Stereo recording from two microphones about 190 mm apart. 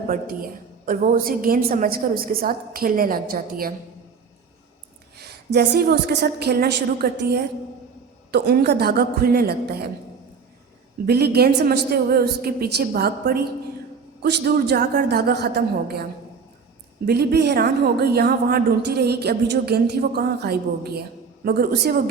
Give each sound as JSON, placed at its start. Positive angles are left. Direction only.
{"t": 0.9, "sound": "a woman's voice", "side_deg": -45}
{"t": 5.1, "sound": "a woman's voice", "side_deg": -55}
{"t": 11.0, "sound": "a woman's voice", "side_deg": -55}
{"t": 17.1, "sound": "a woman's voice", "side_deg": -60}